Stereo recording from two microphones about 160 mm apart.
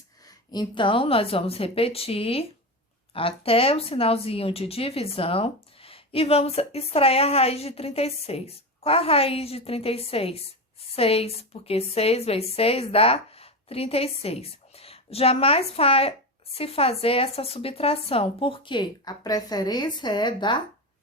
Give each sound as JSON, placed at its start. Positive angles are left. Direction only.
{"t": 0.3, "sound": "speech", "side_deg": 25}